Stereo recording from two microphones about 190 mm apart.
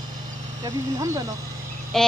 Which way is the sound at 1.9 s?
Centre (ahead or behind).